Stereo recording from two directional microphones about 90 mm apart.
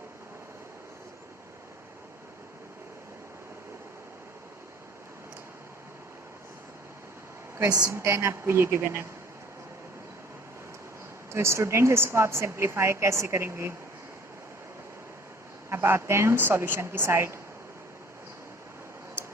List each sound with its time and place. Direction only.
7.6 s a woman's voice: 40° right (ahead or behind)
11.3 s speech: 30° right (ahead or behind)
15.7 s speech: 30° right (ahead or behind)